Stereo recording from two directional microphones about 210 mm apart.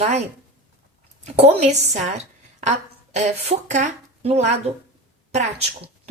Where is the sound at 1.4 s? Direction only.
30° right (ahead or behind).